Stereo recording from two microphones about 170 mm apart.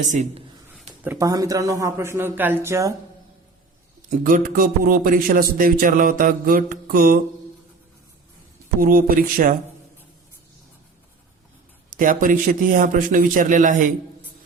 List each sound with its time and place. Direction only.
0.0 s a man's voice: 45° right (ahead or behind)
1.0 s speech: 10° right (ahead or behind)
4.1 s a man's voice: 50° right (ahead or behind)
8.8 s a man's voice: 55° right (ahead or behind)
11.9 s a man's voice: 50° right (ahead or behind)